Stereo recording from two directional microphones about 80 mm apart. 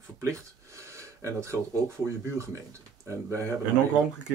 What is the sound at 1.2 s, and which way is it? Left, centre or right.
Speech, right.